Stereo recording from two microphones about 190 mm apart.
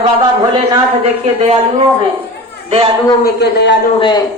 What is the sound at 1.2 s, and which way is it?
Speech, 35° right (ahead or behind).